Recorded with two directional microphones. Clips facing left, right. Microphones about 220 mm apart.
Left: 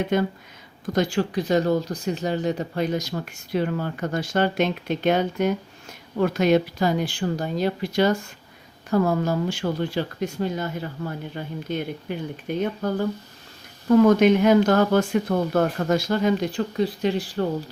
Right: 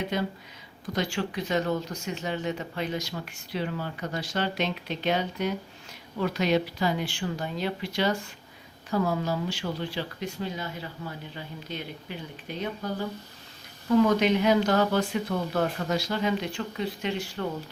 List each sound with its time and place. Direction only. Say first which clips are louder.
0.1 s speech: left 8 dB; 50° left (ahead or behind)
0.9 s speech: left 7 dB; 40° left (ahead or behind)